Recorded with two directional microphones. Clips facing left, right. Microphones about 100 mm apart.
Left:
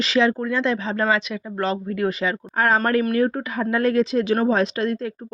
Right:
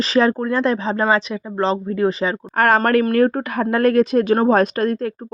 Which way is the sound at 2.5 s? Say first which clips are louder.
Right 4 dB; 70° right (ahead or behind).